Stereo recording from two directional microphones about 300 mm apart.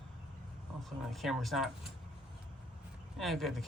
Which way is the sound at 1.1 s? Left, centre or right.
Centre.